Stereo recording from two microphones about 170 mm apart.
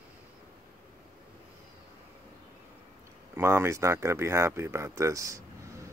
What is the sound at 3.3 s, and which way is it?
Speech, 15° right (ahead or behind).